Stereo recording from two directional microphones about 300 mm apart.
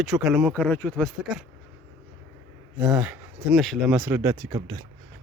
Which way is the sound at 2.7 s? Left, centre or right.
Centre.